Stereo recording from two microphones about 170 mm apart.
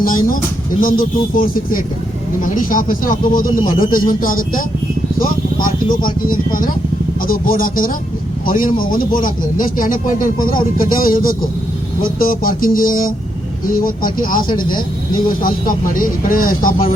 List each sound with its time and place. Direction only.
0.0 s speech: 55° left (ahead or behind)
5.6 s speech: 55° left (ahead or behind)